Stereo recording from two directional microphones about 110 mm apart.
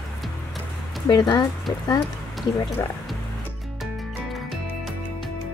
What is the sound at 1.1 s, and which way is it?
Speech, 35° left (ahead or behind).